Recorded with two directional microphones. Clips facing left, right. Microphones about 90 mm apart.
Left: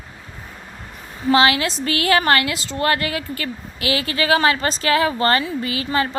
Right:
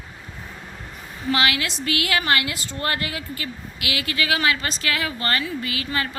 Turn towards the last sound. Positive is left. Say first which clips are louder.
# left 5 dB
turn(degrees=30)  # may be behind; listen again after turning